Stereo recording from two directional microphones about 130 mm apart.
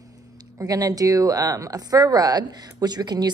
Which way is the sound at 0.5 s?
25° right (ahead or behind).